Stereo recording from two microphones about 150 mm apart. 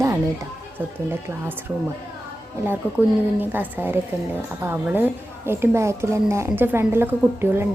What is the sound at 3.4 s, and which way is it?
A woman's voice, 15° right (ahead or behind).